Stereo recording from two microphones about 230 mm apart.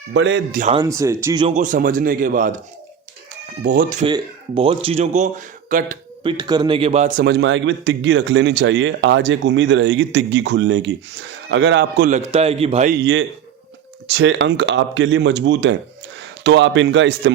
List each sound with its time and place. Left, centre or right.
0.1 s a man's voice: right
0.8 s speech: centre
1.5 s speech: right
3.7 s speech: right
4.0 s speech: right
6.2 s a man's voice: centre; by 12.1 s right
12.1 s speech: right
12.9 s a man's voice: right